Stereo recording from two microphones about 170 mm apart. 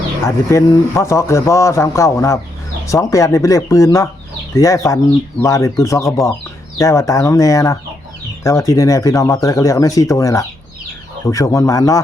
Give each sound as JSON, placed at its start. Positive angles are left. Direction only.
{"t": 0.3, "sound": "a man's voice", "side_deg": 15}